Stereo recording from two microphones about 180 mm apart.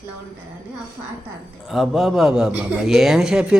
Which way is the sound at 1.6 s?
Centre (ahead or behind).